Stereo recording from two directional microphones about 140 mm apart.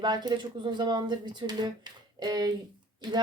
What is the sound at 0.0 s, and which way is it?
Speech, 30° right (ahead or behind).